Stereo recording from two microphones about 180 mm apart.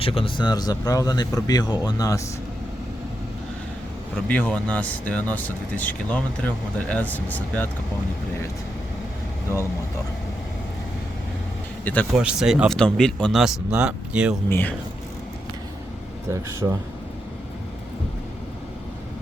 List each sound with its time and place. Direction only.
0.0 s speech: 30° left (ahead or behind)
4.3 s speech: 10° left (ahead or behind)
12.1 s speech: 5° right (ahead or behind)
14.5 s speech: 10° left (ahead or behind)
16.6 s speech: 10° right (ahead or behind)